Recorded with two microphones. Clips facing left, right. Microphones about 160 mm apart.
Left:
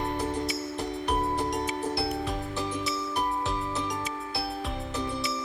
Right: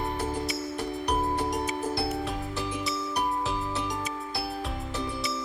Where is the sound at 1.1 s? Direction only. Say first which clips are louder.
Even; centre (ahead or behind).